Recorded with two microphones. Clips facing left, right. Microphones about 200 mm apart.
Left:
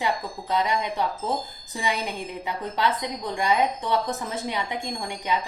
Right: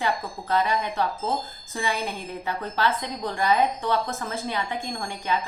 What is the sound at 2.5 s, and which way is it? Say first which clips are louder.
A woman's voice: even; 15° left (ahead or behind).